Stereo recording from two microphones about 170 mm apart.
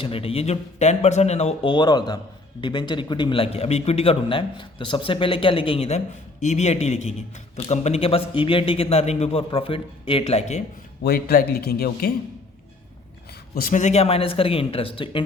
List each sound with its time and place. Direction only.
0.0 s speech: 35° left (ahead or behind)
11.0 s a man's voice: 65° left (ahead or behind)
13.5 s speech: 55° left (ahead or behind); by 15.2 s 30° left (ahead or behind)